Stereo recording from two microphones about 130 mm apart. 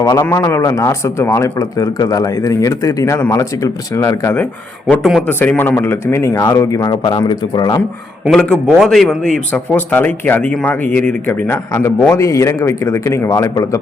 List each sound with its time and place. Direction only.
0.0 s a man's voice: 30° left (ahead or behind)
8.3 s a man's voice: 5° left (ahead or behind); by 13.7 s 25° left (ahead or behind)